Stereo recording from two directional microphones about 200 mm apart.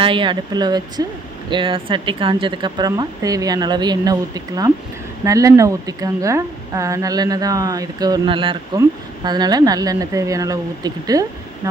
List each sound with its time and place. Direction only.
0.0 s a woman's voice: 25° right (ahead or behind)